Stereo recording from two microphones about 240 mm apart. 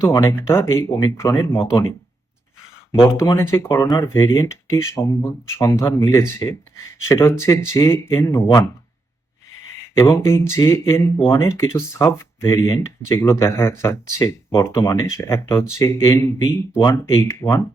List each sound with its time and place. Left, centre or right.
0.0 s speech: centre
3.0 s speech: centre
10.0 s speech: centre